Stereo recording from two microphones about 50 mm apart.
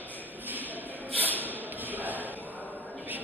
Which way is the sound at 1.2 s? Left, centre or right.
Right.